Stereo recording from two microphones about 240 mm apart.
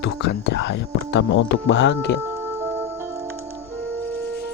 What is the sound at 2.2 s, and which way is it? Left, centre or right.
Music, centre.